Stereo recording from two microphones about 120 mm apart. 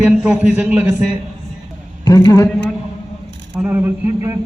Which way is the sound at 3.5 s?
20° right (ahead or behind).